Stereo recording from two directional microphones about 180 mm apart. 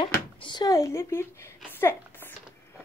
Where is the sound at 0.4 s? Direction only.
25° left (ahead or behind).